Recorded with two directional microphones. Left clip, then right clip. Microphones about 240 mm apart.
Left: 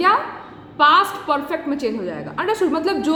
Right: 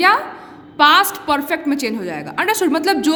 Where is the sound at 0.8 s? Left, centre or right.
Right.